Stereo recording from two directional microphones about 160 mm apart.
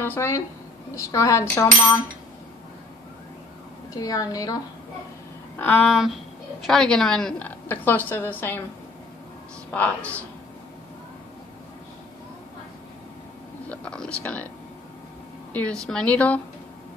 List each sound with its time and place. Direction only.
0.0 s a woman's voice: 15° left (ahead or behind)
0.9 s a sound: 20° left (ahead or behind)
3.9 s a sound: 20° left (ahead or behind)
5.6 s a woman's voice: 5° left (ahead or behind)
9.7 s a woman's voice: 10° left (ahead or behind)
13.7 s a woman's voice: 5° left (ahead or behind)
15.5 s a woman's voice: 5° left (ahead or behind)